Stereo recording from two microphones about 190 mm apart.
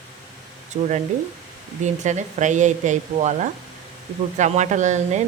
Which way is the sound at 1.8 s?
40° right (ahead or behind).